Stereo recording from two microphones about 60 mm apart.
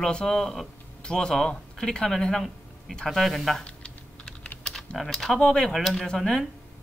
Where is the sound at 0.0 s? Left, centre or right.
Centre.